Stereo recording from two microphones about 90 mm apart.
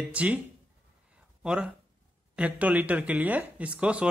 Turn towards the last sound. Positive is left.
turn(degrees=-15)  # may be behind; listen again after turning